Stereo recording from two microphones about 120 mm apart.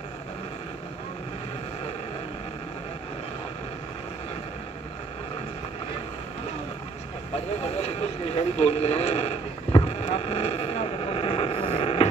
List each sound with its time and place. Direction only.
7.3 s vehicle: 60° left (ahead or behind)